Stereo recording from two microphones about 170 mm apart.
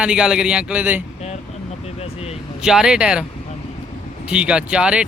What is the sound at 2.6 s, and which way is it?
Speech, 5° right (ahead or behind).